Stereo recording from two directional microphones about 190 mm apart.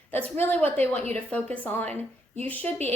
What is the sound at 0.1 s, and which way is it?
Speech, 10° left (ahead or behind).